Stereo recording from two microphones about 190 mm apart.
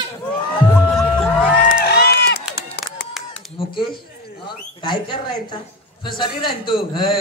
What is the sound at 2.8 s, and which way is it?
Clapping, 55° left (ahead or behind).